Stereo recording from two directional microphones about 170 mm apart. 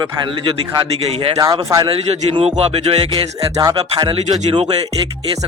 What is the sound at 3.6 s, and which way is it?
Speech, 25° right (ahead or behind).